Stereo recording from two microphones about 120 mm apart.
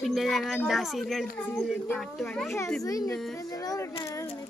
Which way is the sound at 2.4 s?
25° left (ahead or behind).